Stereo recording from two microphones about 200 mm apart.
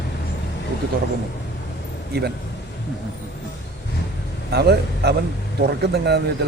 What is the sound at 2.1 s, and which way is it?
Speech, 55° right (ahead or behind).